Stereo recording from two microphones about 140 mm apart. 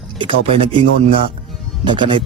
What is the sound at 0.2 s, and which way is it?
Speech, 40° right (ahead or behind).